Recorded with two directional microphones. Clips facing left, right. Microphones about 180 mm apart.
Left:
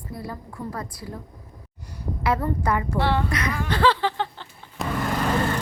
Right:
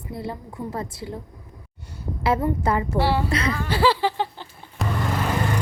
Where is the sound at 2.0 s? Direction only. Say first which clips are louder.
Right 2 dB; 25° right (ahead or behind).